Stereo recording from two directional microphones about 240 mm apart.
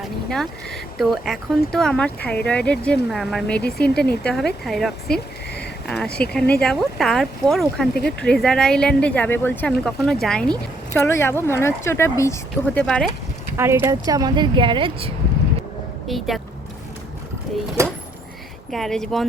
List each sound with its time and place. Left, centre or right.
0.0 s speech: centre
13.6 s speech: centre
16.0 s speech: centre
18.7 s speech: centre